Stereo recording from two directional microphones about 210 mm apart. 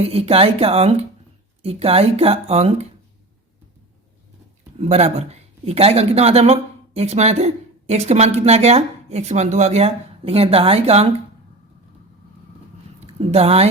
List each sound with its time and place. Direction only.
0.0 s speech: 30° right (ahead or behind)
4.8 s speech: 30° right (ahead or behind)
13.1 s speech: 30° right (ahead or behind)